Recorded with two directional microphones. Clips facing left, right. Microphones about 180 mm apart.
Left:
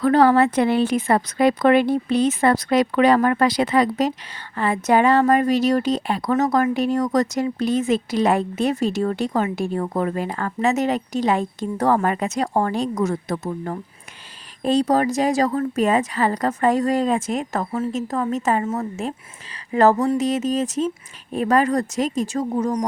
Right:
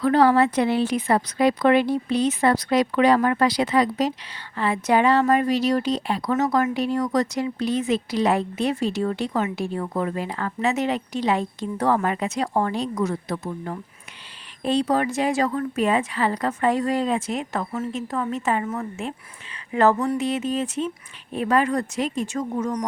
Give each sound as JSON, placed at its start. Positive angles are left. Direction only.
{"t": 0.0, "sound": "speech", "side_deg": 50}
{"t": 18.6, "sound": "speech", "side_deg": 25}
{"t": 19.7, "sound": "speech", "side_deg": 35}